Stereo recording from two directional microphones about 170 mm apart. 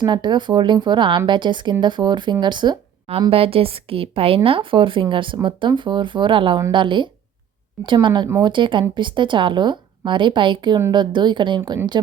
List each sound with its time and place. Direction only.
0.0 s speech: 25° right (ahead or behind)